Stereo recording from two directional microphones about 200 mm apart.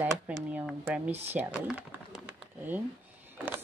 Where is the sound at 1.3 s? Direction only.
5° right (ahead or behind).